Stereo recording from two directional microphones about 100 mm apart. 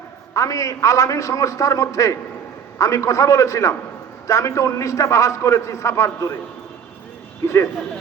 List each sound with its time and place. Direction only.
0.3 s a man's voice: 35° left (ahead or behind)
7.4 s speech: 25° left (ahead or behind)